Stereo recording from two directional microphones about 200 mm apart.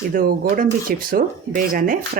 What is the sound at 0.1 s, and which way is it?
Speech, 45° right (ahead or behind).